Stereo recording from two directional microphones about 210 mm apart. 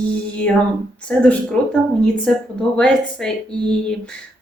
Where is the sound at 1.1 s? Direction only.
5° left (ahead or behind).